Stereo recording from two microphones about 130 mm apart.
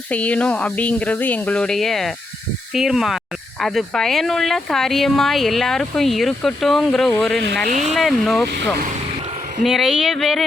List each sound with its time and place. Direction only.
0.1 s speech: 10° left (ahead or behind)
7.7 s speech: 70° right (ahead or behind)
7.9 s speech: centre (ahead or behind)
9.6 s speech: centre (ahead or behind)